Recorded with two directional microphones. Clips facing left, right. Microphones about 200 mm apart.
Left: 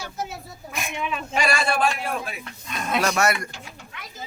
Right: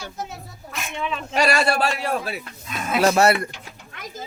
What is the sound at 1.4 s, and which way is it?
Speech, 40° right (ahead or behind).